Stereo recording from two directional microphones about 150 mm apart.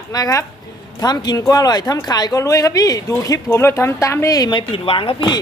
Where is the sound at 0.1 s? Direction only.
25° left (ahead or behind).